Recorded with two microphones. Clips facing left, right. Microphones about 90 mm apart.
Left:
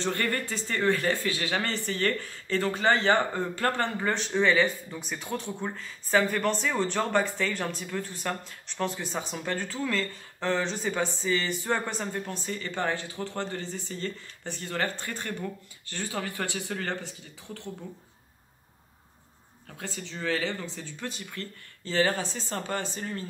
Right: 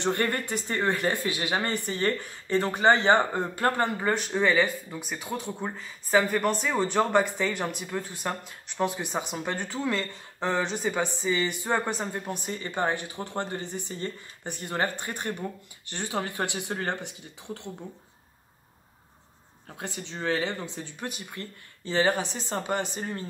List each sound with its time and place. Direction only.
0.0 s speech: 20° right (ahead or behind)
19.8 s speech: 20° right (ahead or behind)